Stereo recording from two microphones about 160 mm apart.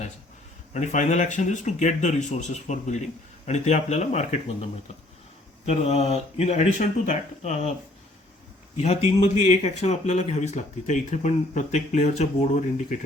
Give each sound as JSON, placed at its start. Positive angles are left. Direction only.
{"t": 0.7, "sound": "speech", "side_deg": 45}
{"t": 8.8, "sound": "speech", "side_deg": 40}